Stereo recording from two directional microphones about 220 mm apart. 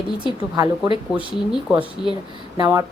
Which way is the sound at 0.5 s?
15° right (ahead or behind).